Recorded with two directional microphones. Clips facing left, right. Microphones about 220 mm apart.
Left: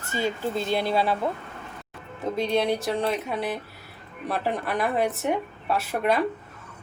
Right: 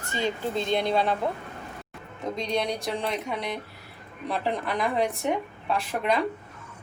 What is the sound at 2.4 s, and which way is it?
Speech, 5° left (ahead or behind).